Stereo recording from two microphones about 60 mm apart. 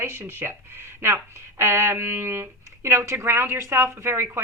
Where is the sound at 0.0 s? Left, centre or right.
Right.